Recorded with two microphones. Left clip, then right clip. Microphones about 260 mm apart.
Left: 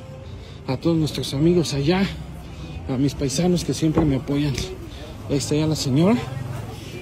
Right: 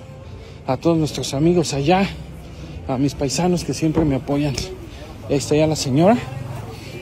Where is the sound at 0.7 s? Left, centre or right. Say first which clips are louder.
Right 4 dB; left.